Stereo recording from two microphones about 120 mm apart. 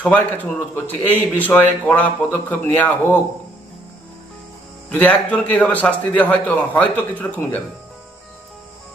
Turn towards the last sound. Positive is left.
turn(degrees=15)  # may be behind; listen again after turning